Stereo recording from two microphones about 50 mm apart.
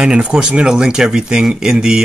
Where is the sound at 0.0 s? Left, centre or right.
Centre.